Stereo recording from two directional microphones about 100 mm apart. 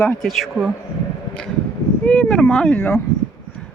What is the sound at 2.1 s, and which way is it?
Speech, 10° left (ahead or behind).